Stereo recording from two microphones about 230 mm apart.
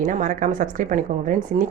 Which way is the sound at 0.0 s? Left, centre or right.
Right.